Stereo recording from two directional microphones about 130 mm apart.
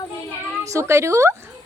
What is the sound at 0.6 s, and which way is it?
Speech, 25° right (ahead or behind).